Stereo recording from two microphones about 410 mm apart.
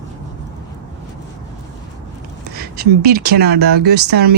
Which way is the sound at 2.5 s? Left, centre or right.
Right.